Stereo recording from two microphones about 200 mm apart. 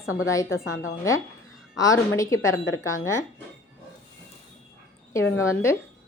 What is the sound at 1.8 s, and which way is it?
Speech, 15° left (ahead or behind).